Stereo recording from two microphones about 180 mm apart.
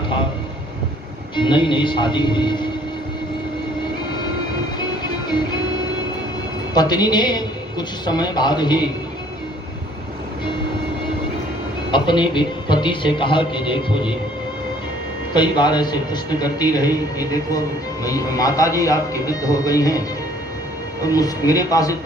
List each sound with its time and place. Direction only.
1.4 s a woman's voice: 25° left (ahead or behind)
5.3 s music: 25° left (ahead or behind)
6.7 s a woman's voice: 25° left (ahead or behind)
11.9 s a woman's voice: 25° left (ahead or behind)
15.3 s a woman's voice: 25° left (ahead or behind)
21.0 s a woman's voice: 20° left (ahead or behind)